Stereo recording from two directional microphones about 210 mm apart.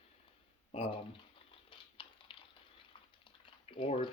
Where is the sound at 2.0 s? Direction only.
25° left (ahead or behind).